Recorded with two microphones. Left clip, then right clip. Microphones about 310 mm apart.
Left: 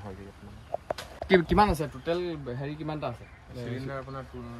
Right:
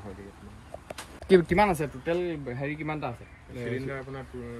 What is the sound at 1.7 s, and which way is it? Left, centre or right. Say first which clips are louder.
Speech: right 1 dB; centre.